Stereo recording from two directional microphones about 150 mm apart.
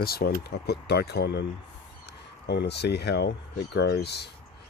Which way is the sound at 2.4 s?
90° left.